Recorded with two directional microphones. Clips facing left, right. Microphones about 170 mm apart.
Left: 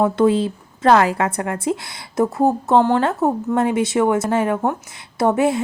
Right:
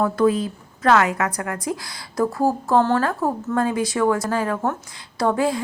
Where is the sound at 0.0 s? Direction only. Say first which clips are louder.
Left 3 dB; 25° left (ahead or behind).